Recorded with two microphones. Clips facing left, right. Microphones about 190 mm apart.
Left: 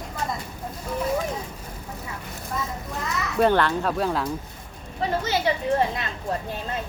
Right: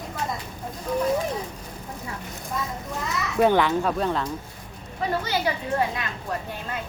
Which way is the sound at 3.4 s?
10° right (ahead or behind).